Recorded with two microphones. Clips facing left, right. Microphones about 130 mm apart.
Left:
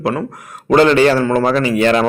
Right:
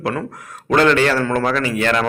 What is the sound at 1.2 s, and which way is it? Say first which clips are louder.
Speech: left 4 dB; 10° left (ahead or behind).